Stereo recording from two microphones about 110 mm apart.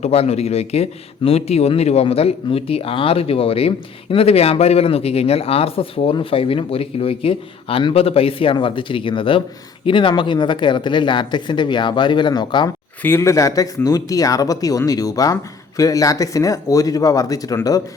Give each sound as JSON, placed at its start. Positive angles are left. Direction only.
{"t": 0.0, "sound": "speech", "side_deg": 65}
{"t": 13.0, "sound": "speech", "side_deg": 20}